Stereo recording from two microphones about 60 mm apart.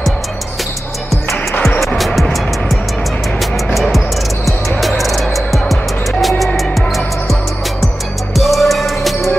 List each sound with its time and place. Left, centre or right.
2.0 s music: centre
8.4 s music: centre